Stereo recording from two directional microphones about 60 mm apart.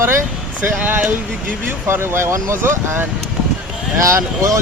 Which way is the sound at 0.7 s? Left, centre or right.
Right.